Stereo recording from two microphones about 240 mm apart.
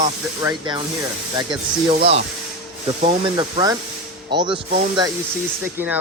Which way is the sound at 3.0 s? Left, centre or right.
Right.